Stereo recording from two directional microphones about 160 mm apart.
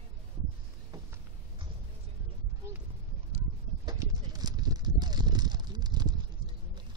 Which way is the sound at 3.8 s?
25° right (ahead or behind).